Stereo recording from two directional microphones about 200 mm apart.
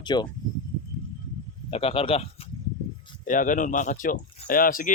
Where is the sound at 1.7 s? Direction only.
30° left (ahead or behind).